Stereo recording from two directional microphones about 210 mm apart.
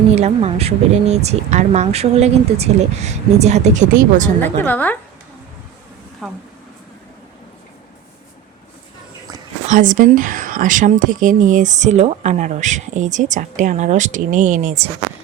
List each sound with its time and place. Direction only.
0.2 s speech: 30° right (ahead or behind)
4.6 s a woman's voice: 10° left (ahead or behind)
6.2 s speech: centre (ahead or behind)
9.6 s speech: 40° right (ahead or behind)